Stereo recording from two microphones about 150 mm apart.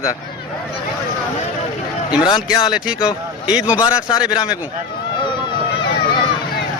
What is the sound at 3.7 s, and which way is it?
Speech, 25° left (ahead or behind).